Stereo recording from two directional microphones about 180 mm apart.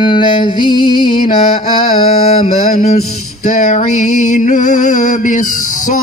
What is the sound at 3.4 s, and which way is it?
Male singing, 45° left (ahead or behind).